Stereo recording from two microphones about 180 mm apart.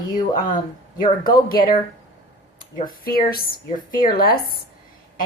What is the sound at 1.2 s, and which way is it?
Speech, 55° left (ahead or behind).